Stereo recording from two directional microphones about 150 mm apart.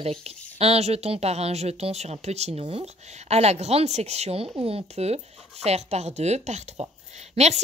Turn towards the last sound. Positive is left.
turn(degrees=-45)  # may be behind; listen again after turning